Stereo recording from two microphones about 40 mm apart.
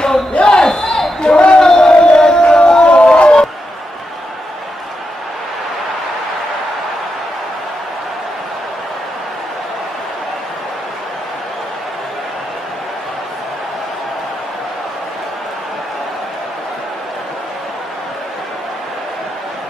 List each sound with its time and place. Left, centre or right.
0.3 s crowd: left
0.6 s a sound: centre
1.6 s crowd: centre